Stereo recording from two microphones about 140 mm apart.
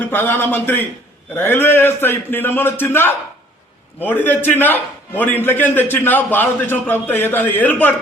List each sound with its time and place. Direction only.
0.1 s a man's voice: 15° left (ahead or behind)